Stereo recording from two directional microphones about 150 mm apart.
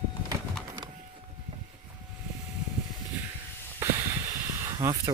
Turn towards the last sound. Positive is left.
turn(degrees=-25)  # may be behind; listen again after turning